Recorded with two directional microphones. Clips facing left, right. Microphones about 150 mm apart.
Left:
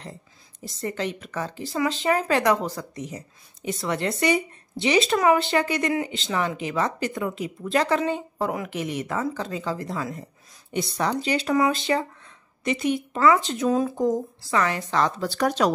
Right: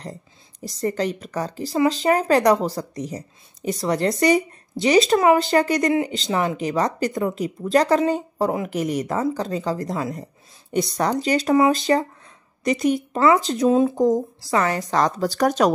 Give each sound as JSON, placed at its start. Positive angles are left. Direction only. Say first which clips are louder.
{"t": 0.7, "sound": "speech", "louder": "right 5 dB", "side_deg": -35}
{"t": 13.7, "sound": "speech", "louder": "right 5 dB", "side_deg": -25}
{"t": 13.9, "sound": "speech", "louder": "right 5 dB", "side_deg": -40}